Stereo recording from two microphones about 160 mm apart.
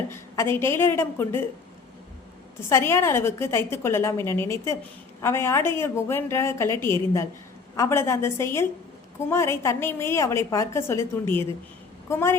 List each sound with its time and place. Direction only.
0.1 s a woman's voice: 15° left (ahead or behind)
2.6 s a woman's voice: 15° left (ahead or behind)